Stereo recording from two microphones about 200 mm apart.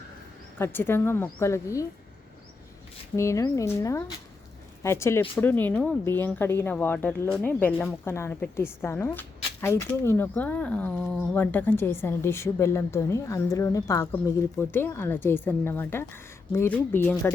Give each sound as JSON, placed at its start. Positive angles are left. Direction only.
{"t": 0.6, "sound": "speech", "side_deg": 10}
{"t": 3.2, "sound": "speech", "side_deg": 15}